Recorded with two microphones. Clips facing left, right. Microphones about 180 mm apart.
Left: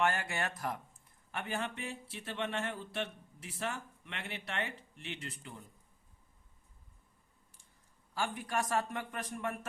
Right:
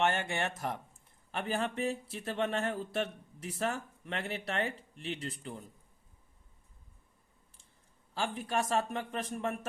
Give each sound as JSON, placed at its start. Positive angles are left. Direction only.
{"t": 0.0, "sound": "a man's voice", "side_deg": -25}
{"t": 8.1, "sound": "a man's voice", "side_deg": -25}